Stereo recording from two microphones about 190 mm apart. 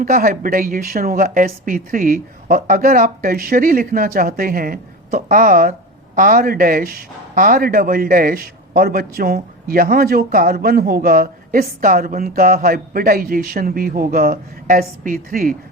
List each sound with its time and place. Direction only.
0.0 s a man's voice: 50° right (ahead or behind)